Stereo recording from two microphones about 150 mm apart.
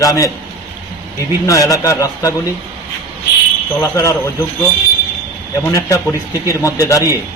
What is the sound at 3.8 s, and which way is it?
Speech, 20° left (ahead or behind).